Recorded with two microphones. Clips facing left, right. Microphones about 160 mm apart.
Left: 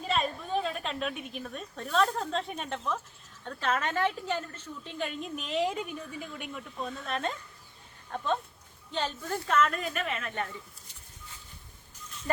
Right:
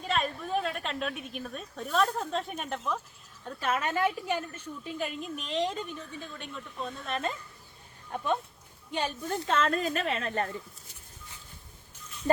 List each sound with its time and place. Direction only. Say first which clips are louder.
0.0 s a sound: even; centre (ahead or behind)
1.4 s a woman's voice: right 1 dB; centre (ahead or behind)
8.1 s a woman's voice: right 1 dB; 15° right (ahead or behind); by 10.5 s 35° right (ahead or behind)